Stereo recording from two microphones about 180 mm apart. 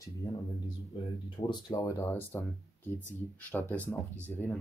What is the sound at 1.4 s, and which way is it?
Speech, 15° left (ahead or behind).